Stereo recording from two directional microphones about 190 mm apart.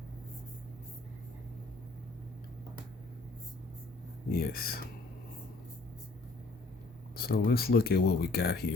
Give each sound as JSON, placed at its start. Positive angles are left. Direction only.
{"t": 4.3, "sound": "speech", "side_deg": 50}
{"t": 7.2, "sound": "speech", "side_deg": 55}